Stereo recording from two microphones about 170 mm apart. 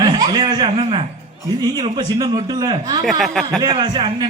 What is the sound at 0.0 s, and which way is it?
Speech, 20° right (ahead or behind).